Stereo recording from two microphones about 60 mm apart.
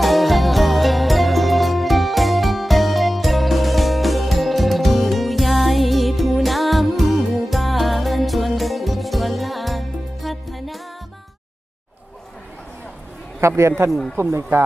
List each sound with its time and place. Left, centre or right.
0.0 s music: centre
13.6 s a man's voice: right